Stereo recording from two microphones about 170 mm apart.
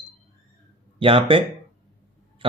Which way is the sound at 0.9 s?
30° right (ahead or behind).